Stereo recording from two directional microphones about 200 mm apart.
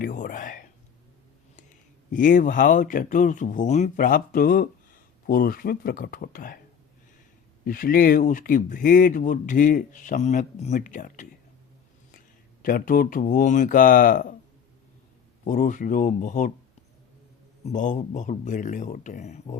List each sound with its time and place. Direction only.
0.0 s speech: 45° left (ahead or behind)
2.0 s speech: 45° left (ahead or behind)
7.6 s speech: 45° left (ahead or behind)
12.6 s speech: 45° left (ahead or behind)
15.4 s speech: 40° left (ahead or behind)
17.7 s speech: 40° left (ahead or behind)